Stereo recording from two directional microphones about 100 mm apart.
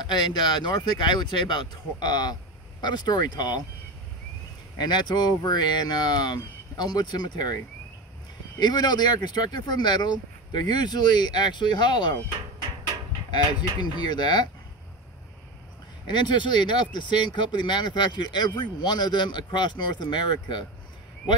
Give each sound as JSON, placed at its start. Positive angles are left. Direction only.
{"t": 0.0, "sound": "speech", "side_deg": 45}
{"t": 4.7, "sound": "speech", "side_deg": 45}
{"t": 8.5, "sound": "speech", "side_deg": 45}
{"t": 13.5, "sound": "speech", "side_deg": 45}
{"t": 16.1, "sound": "speech", "side_deg": 50}